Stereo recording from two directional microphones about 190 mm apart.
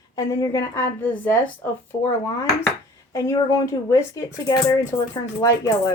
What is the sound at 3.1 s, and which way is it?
Speech, 15° left (ahead or behind).